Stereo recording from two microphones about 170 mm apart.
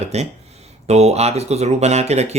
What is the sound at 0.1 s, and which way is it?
Speech, 40° right (ahead or behind).